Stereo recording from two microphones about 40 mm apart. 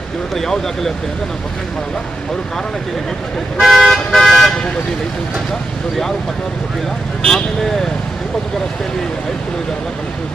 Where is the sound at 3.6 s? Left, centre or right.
Centre.